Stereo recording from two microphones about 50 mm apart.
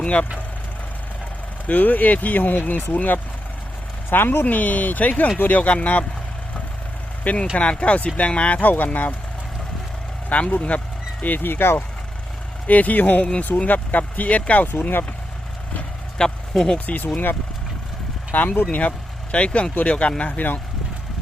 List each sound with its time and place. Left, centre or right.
0.0 s speech: left
1.6 s speech: left
4.1 s speech: left
4.4 s speech: left
7.5 s speech: left
8.6 s speech: left
10.3 s speech: left
11.2 s speech: left
12.6 s speech: left
16.1 s speech: centre
16.7 s speech: left
18.3 s speech: left